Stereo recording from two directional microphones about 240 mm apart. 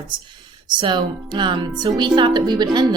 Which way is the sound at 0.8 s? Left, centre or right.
Centre.